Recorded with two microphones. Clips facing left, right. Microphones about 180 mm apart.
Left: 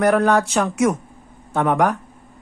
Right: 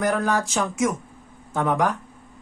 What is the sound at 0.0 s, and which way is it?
Speech, 65° left (ahead or behind).